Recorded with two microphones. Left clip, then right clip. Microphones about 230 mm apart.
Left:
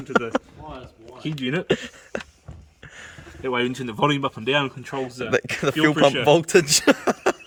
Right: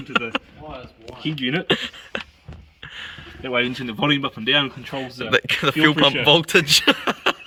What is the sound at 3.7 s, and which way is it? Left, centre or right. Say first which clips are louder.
Speech: right 1 dB; left.